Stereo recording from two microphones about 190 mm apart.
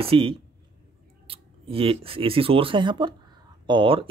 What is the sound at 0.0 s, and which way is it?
Speech, 30° right (ahead or behind).